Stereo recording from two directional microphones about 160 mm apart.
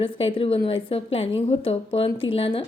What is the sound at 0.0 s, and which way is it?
A woman's voice, 35° left (ahead or behind).